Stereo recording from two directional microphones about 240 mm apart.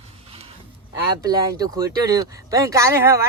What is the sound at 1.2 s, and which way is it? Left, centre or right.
Speech, centre.